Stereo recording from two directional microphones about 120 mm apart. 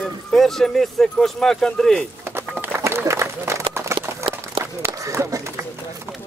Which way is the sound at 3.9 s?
25° right (ahead or behind).